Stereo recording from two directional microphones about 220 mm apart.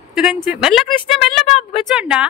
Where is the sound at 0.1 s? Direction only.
5° right (ahead or behind).